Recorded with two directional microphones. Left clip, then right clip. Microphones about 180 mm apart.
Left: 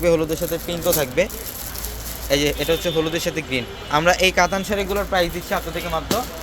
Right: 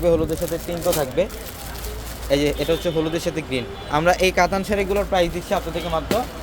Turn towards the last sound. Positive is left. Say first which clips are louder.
# right 1 dB
turn(degrees=-10)  # may be behind; listen again after turning